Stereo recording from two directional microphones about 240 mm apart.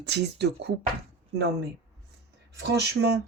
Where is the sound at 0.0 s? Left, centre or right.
Right.